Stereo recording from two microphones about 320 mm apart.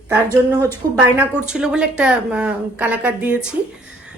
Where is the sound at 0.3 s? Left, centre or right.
Centre.